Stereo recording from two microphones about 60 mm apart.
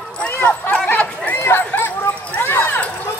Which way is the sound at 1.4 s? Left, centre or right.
Left.